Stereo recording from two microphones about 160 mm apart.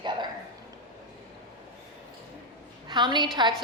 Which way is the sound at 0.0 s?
30° right (ahead or behind).